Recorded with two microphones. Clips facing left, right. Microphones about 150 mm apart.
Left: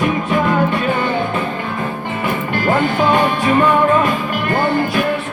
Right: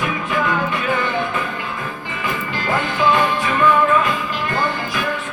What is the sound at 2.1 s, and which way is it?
Music, 55° left (ahead or behind).